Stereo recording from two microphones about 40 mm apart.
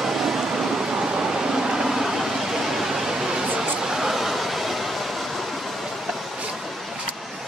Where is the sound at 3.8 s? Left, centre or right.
Centre.